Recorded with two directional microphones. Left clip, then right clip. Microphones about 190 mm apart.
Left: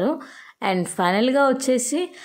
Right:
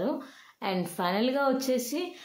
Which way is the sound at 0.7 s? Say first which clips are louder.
Left 9 dB; 40° left (ahead or behind).